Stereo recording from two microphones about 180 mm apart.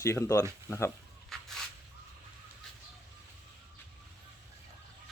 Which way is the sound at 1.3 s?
Centre (ahead or behind).